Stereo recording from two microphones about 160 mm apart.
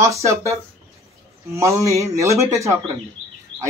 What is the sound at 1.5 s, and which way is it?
Speech, 20° right (ahead or behind).